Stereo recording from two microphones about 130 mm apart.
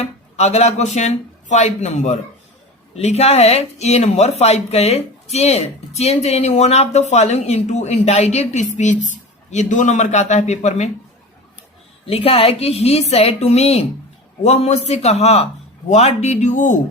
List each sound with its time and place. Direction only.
0.0 s speech: 55° left (ahead or behind)
12.0 s a woman's voice: 45° left (ahead or behind); by 16.7 s 75° left (ahead or behind)